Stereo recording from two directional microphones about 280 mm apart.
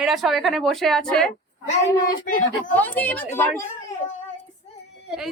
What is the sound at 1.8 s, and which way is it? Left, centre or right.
Speech, left.